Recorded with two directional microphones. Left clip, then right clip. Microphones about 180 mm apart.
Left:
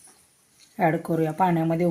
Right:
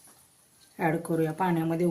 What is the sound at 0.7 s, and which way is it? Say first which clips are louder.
Speech: left 5 dB; 50° left (ahead or behind).